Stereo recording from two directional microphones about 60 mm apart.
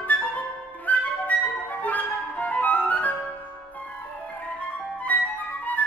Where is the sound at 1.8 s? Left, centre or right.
Left.